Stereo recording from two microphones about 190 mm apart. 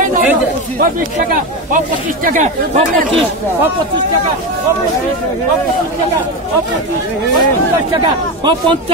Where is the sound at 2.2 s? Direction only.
40° right (ahead or behind).